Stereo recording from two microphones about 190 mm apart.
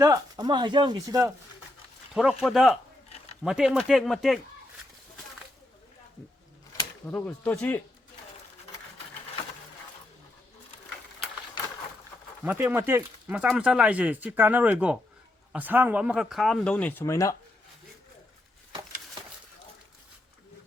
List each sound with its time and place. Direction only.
0.0 s speech: 20° right (ahead or behind)
2.4 s speech: centre (ahead or behind)
7.0 s speech: 10° left (ahead or behind)
12.5 s speech: 10° right (ahead or behind); by 17.3 s 15° left (ahead or behind)